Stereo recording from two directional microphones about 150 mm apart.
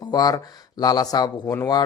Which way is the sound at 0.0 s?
25° left (ahead or behind).